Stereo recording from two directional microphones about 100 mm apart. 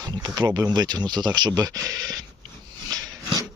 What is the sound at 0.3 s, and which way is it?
Speech, 40° right (ahead or behind).